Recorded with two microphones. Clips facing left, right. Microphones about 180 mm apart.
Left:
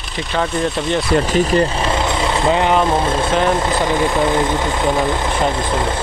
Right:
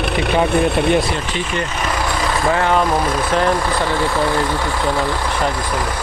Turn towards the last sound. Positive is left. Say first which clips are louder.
# left 2 dB
turn(degrees=20)  # may be behind; listen again after turning